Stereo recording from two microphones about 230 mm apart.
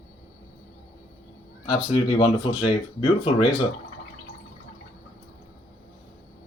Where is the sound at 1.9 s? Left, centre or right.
Left.